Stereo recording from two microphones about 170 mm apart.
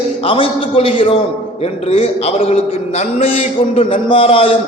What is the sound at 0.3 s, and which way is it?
A man's voice, 30° left (ahead or behind).